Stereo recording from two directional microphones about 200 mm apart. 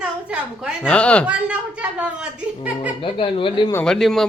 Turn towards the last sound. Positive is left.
turn(degrees=0)  # may be behind; listen again after turning